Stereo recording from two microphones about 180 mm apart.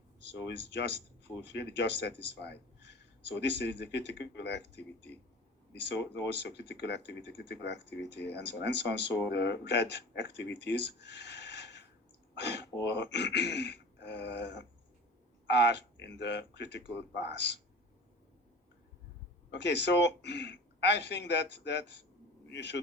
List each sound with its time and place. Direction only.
0.3 s speech: 70° left (ahead or behind)
19.5 s speech: 75° left (ahead or behind)